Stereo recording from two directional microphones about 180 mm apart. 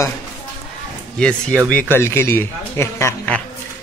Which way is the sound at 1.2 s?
5° left (ahead or behind).